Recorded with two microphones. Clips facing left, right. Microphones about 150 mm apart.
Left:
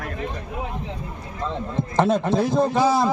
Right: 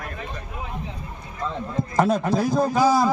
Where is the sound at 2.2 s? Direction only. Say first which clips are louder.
Left 1 dB; 5° right (ahead or behind).